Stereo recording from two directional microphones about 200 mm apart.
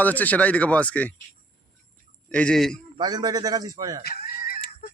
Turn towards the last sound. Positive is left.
turn(degrees=50)  # may be behind; listen again after turning